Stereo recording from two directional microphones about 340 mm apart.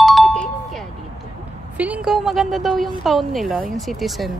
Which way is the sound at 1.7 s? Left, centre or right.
Centre.